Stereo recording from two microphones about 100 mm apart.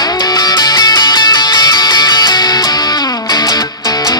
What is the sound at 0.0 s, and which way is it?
Music, 40° left (ahead or behind).